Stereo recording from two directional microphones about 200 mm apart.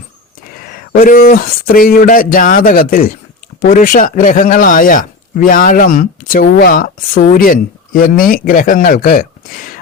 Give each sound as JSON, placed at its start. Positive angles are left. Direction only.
{"t": 0.5, "sound": "a man's voice", "side_deg": 45}